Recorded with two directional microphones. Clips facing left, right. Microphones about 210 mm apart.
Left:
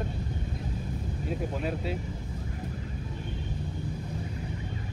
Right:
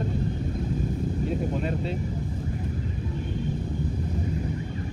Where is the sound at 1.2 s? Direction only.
5° left (ahead or behind).